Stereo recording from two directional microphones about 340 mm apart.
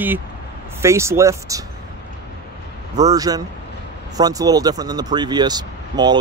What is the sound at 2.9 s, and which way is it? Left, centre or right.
Speech, centre.